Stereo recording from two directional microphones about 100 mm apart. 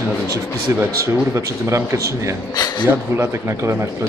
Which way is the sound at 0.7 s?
25° right (ahead or behind).